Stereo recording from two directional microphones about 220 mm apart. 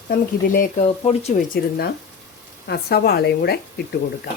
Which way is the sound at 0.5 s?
35° left (ahead or behind).